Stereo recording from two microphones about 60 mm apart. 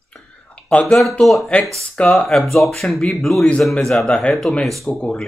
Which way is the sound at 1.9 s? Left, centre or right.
Centre.